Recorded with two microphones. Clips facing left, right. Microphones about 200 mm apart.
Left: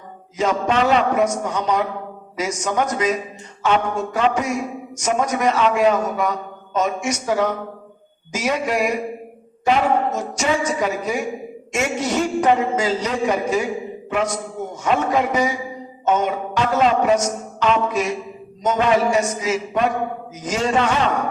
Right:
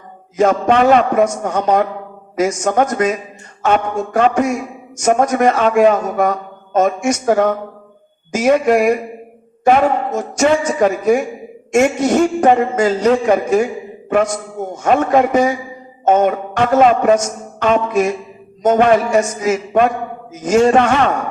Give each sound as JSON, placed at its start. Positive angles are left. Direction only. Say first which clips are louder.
{"t": 0.3, "sound": "a man's voice", "louder": "right 6 dB", "side_deg": -55}
{"t": 10.2, "sound": "a man's voice", "louder": "right 7 dB", "side_deg": -50}